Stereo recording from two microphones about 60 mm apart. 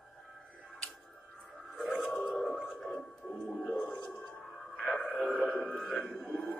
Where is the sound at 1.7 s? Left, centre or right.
Centre.